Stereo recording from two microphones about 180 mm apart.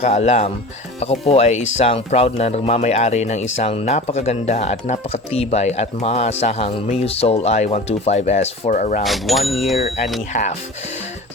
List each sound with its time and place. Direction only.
0.0 s speech: 35° left (ahead or behind)
9.0 s speech: centre (ahead or behind)